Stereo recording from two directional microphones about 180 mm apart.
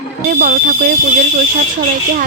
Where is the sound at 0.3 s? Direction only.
55° right (ahead or behind).